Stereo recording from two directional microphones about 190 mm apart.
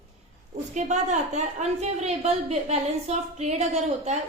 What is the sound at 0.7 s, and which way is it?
A woman's voice, 40° right (ahead or behind).